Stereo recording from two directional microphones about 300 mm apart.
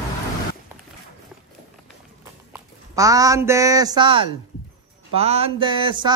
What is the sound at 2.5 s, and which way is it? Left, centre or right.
Speech, centre.